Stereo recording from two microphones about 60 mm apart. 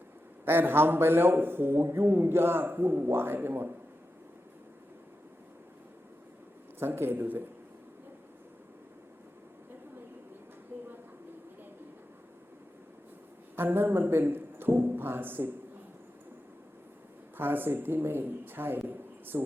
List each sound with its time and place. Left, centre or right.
0.4 s a man's voice: right
6.7 s a man's voice: right
13.6 s a man's voice: right
17.3 s a man's voice: right
18.9 s a sound: right